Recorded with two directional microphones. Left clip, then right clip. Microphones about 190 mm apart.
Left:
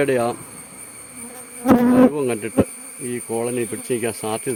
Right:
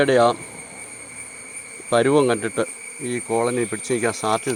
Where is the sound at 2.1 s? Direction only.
15° left (ahead or behind).